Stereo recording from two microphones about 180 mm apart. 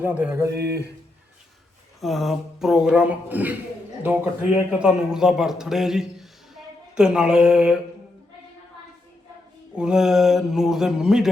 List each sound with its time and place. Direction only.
0.0 s a sound: 10° right (ahead or behind)
0.5 s mantra: 65° right (ahead or behind)
2.0 s a man's voice: centre (ahead or behind)
9.7 s speech: 5° right (ahead or behind)